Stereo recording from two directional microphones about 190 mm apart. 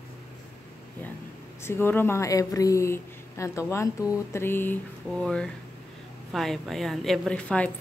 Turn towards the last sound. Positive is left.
turn(degrees=5)  # may be behind; listen again after turning